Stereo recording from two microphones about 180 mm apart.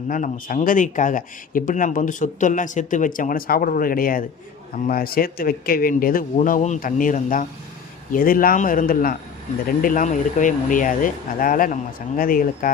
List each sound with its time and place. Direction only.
0.1 s speech: 50° left (ahead or behind)